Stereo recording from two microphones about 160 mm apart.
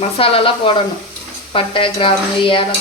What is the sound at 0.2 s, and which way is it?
A woman's voice, 35° left (ahead or behind).